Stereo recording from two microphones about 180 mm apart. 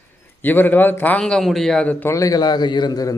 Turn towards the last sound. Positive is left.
turn(degrees=20)  # may be behind; listen again after turning